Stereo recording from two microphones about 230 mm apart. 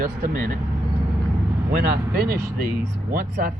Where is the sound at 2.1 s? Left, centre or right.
Right.